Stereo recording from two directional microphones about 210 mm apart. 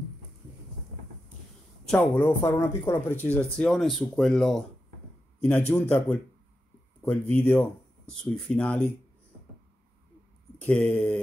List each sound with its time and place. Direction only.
1.9 s a man's voice: 10° left (ahead or behind)
10.6 s speech: 5° left (ahead or behind)